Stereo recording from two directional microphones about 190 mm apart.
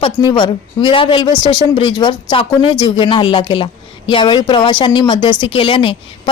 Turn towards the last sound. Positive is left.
turn(degrees=25)  # may be behind; listen again after turning